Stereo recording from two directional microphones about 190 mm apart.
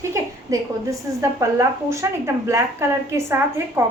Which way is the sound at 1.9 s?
15° right (ahead or behind).